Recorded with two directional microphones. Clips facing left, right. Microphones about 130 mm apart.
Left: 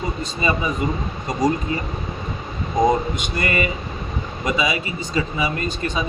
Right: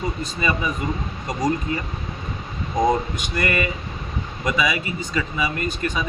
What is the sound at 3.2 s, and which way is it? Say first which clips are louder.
Speech: left 1 dB; 20° left (ahead or behind).